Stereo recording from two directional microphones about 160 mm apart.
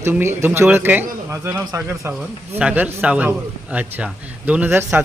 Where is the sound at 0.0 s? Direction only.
15° right (ahead or behind).